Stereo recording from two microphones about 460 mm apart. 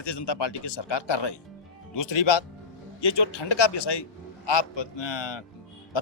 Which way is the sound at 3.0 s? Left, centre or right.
Left.